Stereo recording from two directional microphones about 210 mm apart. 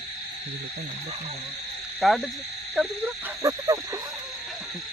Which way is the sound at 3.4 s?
15° right (ahead or behind).